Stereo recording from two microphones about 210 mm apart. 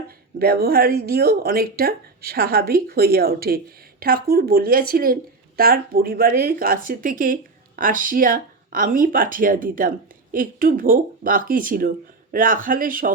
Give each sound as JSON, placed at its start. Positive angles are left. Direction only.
{"t": 0.1, "sound": "speech", "side_deg": -45}